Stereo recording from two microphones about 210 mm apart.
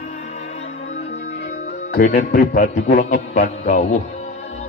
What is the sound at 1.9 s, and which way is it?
A man's voice, 40° left (ahead or behind).